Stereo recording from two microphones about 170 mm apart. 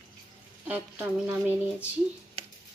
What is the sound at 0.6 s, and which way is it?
Speech, 10° right (ahead or behind).